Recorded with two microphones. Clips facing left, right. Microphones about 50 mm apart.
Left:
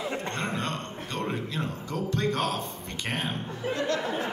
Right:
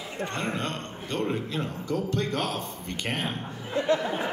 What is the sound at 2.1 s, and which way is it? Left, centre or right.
Speech, left.